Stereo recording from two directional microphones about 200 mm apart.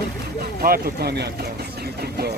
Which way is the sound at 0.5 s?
50° right (ahead or behind).